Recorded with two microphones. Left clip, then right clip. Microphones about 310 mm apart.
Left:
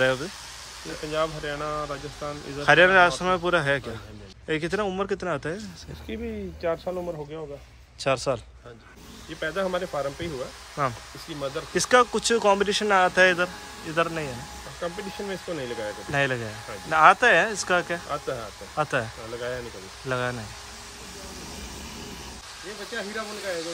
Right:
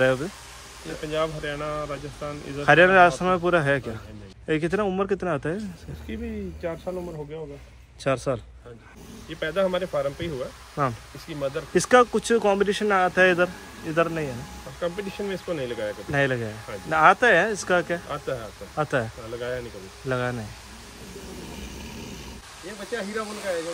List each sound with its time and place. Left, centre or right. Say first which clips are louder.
0.0 s speech: right 2 dB; centre
6.0 s speech: left 1 dB; left
8.0 s speech: even; centre